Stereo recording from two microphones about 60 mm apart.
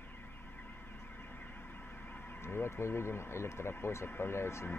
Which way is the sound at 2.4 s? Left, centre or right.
Left.